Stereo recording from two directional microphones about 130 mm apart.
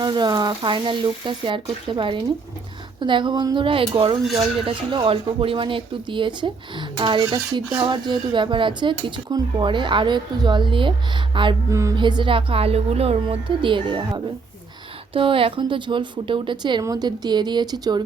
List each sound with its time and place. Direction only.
0.0 s speech: 35° right (ahead or behind)
11.7 s music: 25° right (ahead or behind)
11.9 s speech: 35° right (ahead or behind)